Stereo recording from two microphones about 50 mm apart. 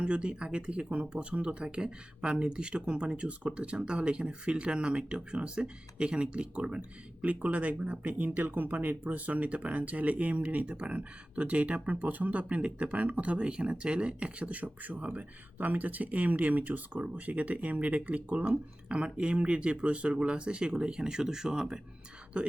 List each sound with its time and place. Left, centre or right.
0.0 s speech: right
22.3 s speech: right